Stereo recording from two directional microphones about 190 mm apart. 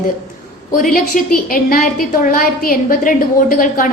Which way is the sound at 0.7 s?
45° left (ahead or behind).